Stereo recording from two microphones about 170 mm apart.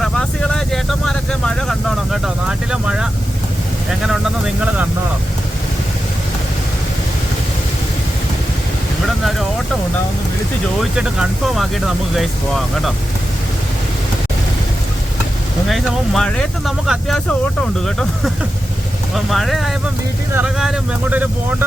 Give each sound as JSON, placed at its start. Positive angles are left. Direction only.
{"t": 0.0, "sound": "vehicle", "side_deg": 5}
{"t": 4.1, "sound": "speech", "side_deg": -5}
{"t": 10.8, "sound": "speech", "side_deg": 0}
{"t": 15.7, "sound": "speech", "side_deg": 5}
{"t": 19.1, "sound": "speech", "side_deg": 0}